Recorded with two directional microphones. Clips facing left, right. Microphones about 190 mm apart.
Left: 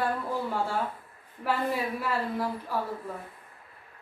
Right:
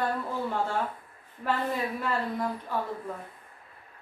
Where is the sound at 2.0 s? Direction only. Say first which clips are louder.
Even; 5° left (ahead or behind).